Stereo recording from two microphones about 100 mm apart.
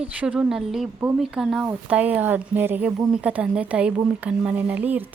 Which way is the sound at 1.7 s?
15° right (ahead or behind).